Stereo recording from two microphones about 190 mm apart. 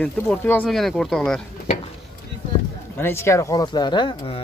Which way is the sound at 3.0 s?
15° left (ahead or behind).